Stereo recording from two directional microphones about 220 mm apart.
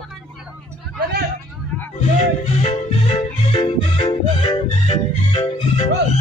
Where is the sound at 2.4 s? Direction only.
30° left (ahead or behind).